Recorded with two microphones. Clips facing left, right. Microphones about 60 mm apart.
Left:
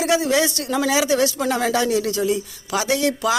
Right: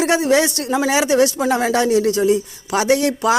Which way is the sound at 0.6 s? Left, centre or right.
Centre.